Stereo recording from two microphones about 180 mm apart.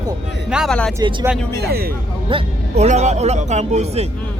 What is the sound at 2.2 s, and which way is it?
Speech, 35° right (ahead or behind).